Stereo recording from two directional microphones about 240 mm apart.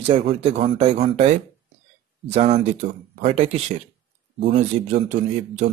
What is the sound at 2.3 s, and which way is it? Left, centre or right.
Speech, right.